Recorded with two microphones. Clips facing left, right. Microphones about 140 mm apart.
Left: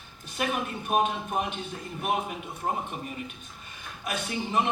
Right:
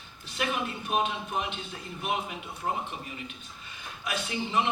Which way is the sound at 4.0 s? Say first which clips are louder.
Left 1 dB; 45° left (ahead or behind).